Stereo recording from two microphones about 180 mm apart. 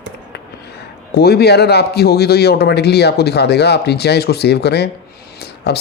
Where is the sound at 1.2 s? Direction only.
65° left (ahead or behind).